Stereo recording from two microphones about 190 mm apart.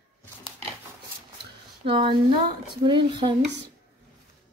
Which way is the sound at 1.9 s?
25° right (ahead or behind).